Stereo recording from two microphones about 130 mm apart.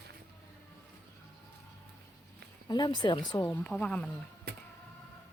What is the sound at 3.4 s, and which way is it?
Speech, 10° left (ahead or behind).